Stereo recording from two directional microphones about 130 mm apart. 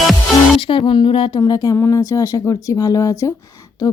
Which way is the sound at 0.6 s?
40° left (ahead or behind).